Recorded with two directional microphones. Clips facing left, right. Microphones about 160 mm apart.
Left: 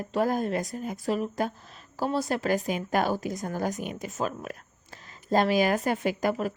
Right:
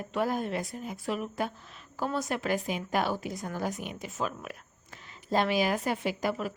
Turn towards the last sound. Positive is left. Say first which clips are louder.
# left 4 dB
turn(degrees=45)  # may be behind; listen again after turning